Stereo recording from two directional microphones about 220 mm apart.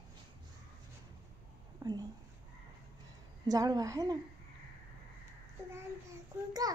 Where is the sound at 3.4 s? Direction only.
15° right (ahead or behind).